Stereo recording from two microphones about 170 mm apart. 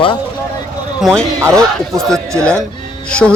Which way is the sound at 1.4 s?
15° right (ahead or behind).